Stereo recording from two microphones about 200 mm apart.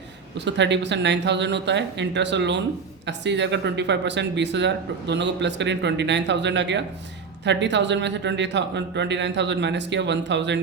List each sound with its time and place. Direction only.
0.3 s speech: 60° right (ahead or behind)